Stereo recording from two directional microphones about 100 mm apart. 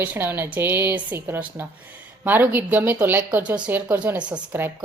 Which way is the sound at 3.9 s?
15° right (ahead or behind).